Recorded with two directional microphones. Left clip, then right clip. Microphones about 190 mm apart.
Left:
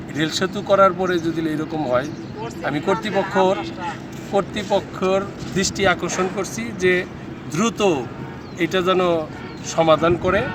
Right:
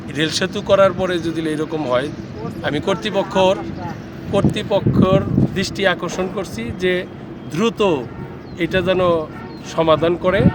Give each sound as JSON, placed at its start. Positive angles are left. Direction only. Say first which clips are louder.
{"t": 0.2, "sound": "speech", "louder": "right 2 dB", "side_deg": -25}